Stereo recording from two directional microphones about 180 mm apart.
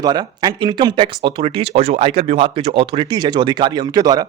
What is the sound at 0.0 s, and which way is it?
Speech, 20° right (ahead or behind).